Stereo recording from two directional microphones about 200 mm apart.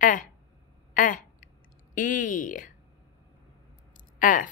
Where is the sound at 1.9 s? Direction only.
40° left (ahead or behind).